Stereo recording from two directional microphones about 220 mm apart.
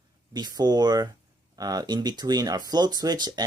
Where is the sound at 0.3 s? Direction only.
20° right (ahead or behind).